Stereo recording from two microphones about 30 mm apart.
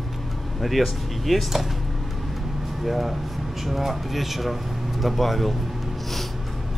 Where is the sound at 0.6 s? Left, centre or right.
Centre.